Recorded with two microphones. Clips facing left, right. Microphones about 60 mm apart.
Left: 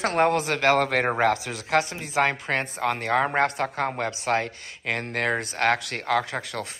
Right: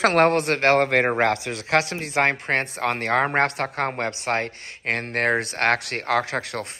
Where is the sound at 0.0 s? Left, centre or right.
Right.